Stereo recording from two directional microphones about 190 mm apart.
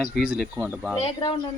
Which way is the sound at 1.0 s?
30° left (ahead or behind).